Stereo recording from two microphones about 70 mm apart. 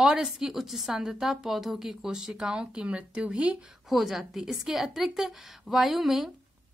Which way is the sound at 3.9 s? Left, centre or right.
Centre.